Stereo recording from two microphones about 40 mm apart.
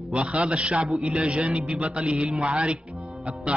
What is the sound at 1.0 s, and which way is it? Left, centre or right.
A man's voice, centre.